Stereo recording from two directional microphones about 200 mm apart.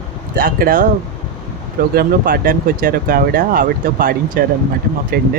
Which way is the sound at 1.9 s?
45° right (ahead or behind).